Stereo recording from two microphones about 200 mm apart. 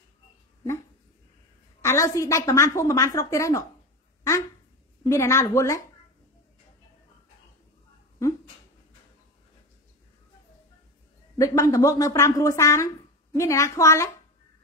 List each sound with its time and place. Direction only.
1.8 s a woman's voice: 15° left (ahead or behind)
5.0 s a woman's voice: 15° left (ahead or behind)
11.3 s a woman's voice: 15° left (ahead or behind)